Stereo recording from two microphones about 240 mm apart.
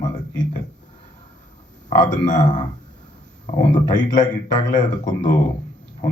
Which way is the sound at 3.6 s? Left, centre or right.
Centre.